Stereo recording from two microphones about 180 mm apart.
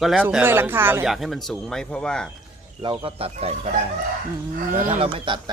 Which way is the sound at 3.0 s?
35° right (ahead or behind).